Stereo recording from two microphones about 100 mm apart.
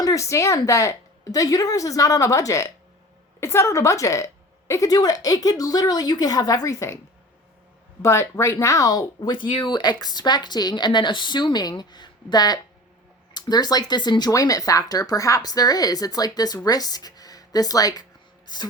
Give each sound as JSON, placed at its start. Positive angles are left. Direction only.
{"t": 0.0, "sound": "a woman's voice", "side_deg": 35}
{"t": 8.0, "sound": "speech", "side_deg": 30}